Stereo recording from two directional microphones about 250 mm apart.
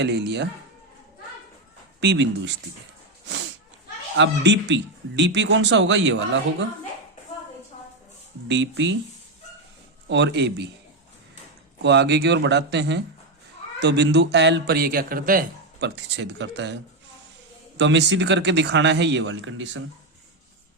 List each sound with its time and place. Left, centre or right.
0.0 s a man's voice: right
2.0 s a man's voice: right
4.2 s a man's voice: right
8.4 s a man's voice: right
10.1 s a man's voice: right
11.8 s a man's voice: right